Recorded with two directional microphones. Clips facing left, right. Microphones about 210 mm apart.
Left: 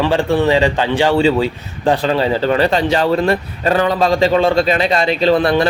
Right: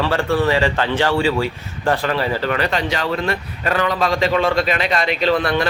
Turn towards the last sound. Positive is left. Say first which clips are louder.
# left 5 dB
turn(degrees=30)  # may be behind; listen again after turning